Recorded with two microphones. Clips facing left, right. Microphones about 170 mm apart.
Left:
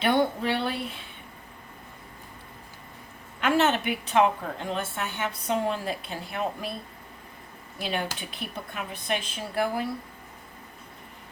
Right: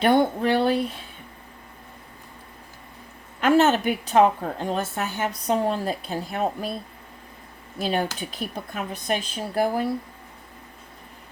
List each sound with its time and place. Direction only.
0.0 s speech: 45° right (ahead or behind)
3.4 s a woman's voice: 40° right (ahead or behind)
7.8 s a woman's voice: 40° right (ahead or behind)